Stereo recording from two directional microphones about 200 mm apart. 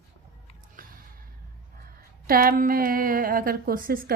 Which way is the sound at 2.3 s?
45° right (ahead or behind).